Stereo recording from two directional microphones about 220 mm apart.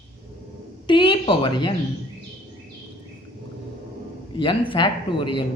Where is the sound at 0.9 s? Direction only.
20° left (ahead or behind).